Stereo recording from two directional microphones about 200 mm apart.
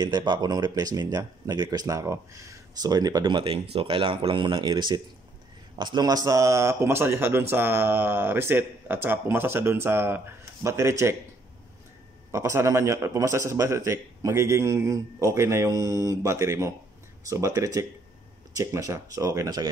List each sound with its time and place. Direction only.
0.0 s a man's voice: 20° right (ahead or behind)
12.3 s a man's voice: 15° right (ahead or behind)